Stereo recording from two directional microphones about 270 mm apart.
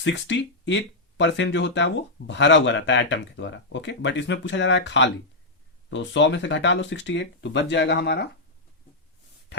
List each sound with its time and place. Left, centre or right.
0.0 s speech: left